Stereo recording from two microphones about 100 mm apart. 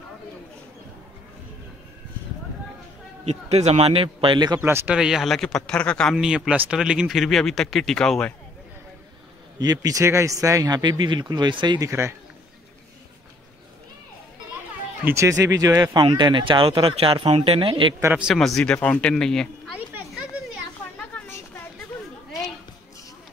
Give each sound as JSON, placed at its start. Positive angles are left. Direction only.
{"t": 3.3, "sound": "a man's voice", "side_deg": -90}
{"t": 4.6, "sound": "speech", "side_deg": -25}
{"t": 4.8, "sound": "speech", "side_deg": -5}
{"t": 6.1, "sound": "speech", "side_deg": -5}
{"t": 9.6, "sound": "a man's voice", "side_deg": -40}
{"t": 10.8, "sound": "speech", "side_deg": -50}
{"t": 11.8, "sound": "speech", "side_deg": -30}
{"t": 15.0, "sound": "speech", "side_deg": -30}
{"t": 18.3, "sound": "speech", "side_deg": 0}